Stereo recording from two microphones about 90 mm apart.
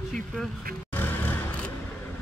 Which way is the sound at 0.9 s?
20° left (ahead or behind).